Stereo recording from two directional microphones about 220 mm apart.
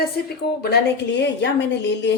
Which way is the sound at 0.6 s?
50° left (ahead or behind).